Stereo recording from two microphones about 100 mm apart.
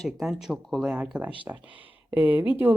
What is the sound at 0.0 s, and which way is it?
Speech, 5° right (ahead or behind).